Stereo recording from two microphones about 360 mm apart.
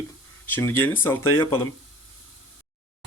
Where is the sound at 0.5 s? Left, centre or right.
Centre.